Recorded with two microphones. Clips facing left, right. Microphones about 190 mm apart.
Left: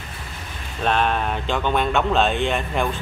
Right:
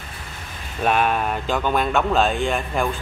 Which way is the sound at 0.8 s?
10° right (ahead or behind).